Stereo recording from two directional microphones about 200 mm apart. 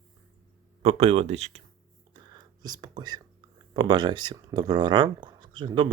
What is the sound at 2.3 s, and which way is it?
Whispering, 20° right (ahead or behind).